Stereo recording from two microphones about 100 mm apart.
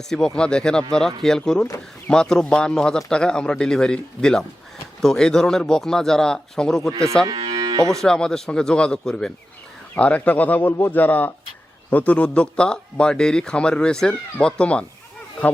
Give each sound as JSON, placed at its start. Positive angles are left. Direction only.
{"t": 0.3, "sound": "a man's voice", "side_deg": 10}
{"t": 6.9, "sound": "speech", "side_deg": -30}
{"t": 7.9, "sound": "speech", "side_deg": 5}